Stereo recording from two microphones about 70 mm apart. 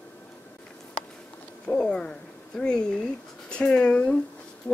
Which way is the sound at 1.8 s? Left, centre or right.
Centre.